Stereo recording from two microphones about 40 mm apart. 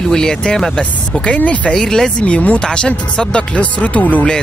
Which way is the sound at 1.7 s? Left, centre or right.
Centre.